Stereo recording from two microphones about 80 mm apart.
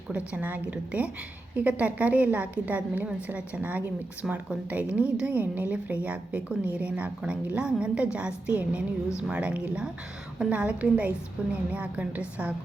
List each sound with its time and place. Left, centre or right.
0.1 s a woman's voice: centre